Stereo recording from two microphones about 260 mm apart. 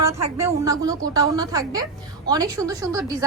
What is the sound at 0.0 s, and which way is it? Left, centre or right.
A woman's voice, centre.